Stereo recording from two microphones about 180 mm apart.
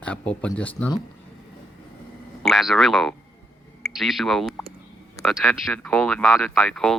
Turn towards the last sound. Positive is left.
turn(degrees=5)  # may be behind; listen again after turning